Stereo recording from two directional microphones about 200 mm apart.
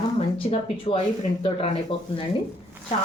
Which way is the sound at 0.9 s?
30° left (ahead or behind).